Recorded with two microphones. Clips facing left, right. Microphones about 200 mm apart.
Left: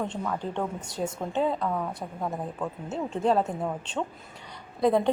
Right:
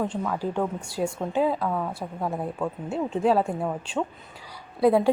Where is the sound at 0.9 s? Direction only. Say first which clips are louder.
Right 3 dB; 20° left (ahead or behind).